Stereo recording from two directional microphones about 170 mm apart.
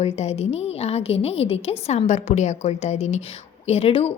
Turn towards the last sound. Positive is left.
turn(degrees=35)  # may be behind; listen again after turning